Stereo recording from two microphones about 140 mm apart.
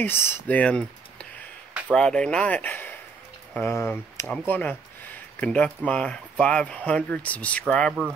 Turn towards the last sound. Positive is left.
turn(degrees=5)  # may be behind; listen again after turning